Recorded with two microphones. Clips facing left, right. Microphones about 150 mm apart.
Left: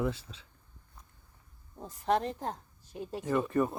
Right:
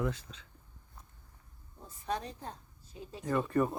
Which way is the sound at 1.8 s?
85° left.